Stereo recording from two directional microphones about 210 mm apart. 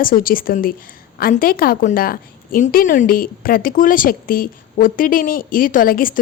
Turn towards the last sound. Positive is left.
turn(degrees=40)  # may be behind; listen again after turning